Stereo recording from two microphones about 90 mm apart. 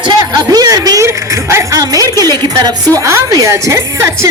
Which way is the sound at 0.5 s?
45° right (ahead or behind).